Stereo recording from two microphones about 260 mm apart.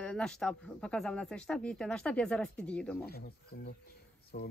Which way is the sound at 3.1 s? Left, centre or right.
Left.